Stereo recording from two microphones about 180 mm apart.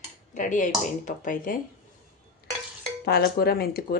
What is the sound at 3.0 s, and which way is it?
Speech, 60° left (ahead or behind).